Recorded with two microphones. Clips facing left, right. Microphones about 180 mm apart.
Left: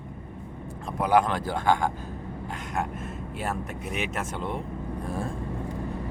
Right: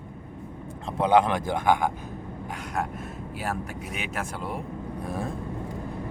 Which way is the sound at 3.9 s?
5° right (ahead or behind).